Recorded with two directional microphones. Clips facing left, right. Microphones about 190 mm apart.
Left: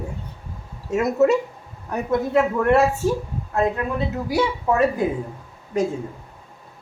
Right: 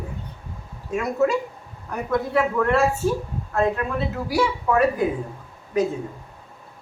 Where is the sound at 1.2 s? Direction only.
20° left (ahead or behind).